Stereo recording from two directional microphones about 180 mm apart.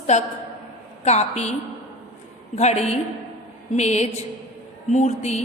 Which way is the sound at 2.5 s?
35° left (ahead or behind).